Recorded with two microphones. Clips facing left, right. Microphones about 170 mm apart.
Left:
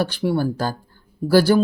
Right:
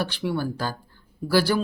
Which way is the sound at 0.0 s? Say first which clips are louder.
Left 6 dB; 40° left (ahead or behind).